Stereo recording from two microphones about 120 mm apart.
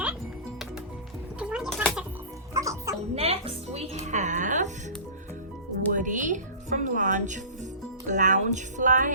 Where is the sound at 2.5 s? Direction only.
25° right (ahead or behind).